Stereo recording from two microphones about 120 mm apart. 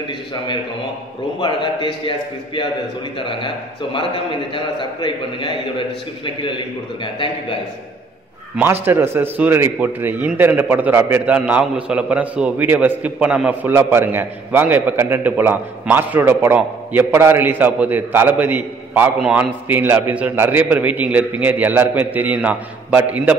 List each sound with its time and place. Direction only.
1.4 s a man's voice: 40° left (ahead or behind)
8.8 s a man's voice: 20° right (ahead or behind)